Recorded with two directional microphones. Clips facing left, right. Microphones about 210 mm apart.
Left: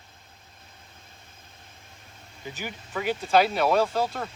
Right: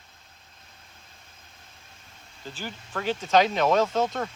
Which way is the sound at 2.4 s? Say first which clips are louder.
Left 1 dB; 15° left (ahead or behind).